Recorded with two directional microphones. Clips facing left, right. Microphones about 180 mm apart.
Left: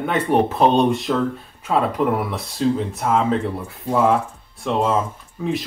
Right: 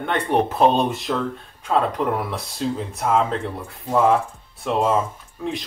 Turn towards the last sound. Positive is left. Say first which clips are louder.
# left 4 dB
turn(degrees=0)  # may be behind; listen again after turning